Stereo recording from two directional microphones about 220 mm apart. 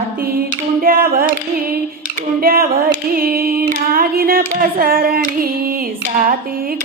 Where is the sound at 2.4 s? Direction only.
45° right (ahead or behind).